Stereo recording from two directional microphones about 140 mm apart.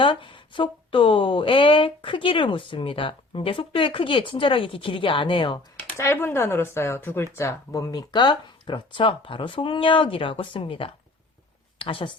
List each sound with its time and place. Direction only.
0.0 s speech: 35° left (ahead or behind)
6.0 s speech: 20° left (ahead or behind); by 12.1 s 40° left (ahead or behind)